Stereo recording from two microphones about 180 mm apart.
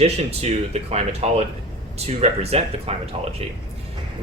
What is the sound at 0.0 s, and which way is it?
Speech, 35° right (ahead or behind).